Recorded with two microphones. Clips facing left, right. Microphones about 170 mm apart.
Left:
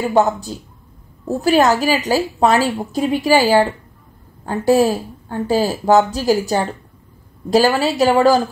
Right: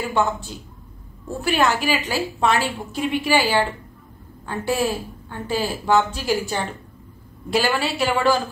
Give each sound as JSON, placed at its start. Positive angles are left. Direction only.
{"t": 0.1, "sound": "a woman's voice", "side_deg": 40}